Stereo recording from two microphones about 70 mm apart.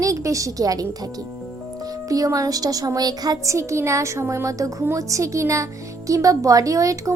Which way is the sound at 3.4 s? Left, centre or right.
Right.